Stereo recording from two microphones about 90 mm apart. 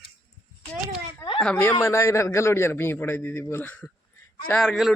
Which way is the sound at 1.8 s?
30° left (ahead or behind).